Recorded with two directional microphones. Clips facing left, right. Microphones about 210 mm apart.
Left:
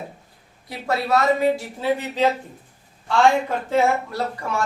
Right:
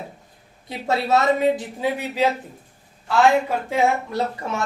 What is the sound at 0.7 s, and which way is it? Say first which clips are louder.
A woman's voice: right 1 dB; 25° right (ahead or behind).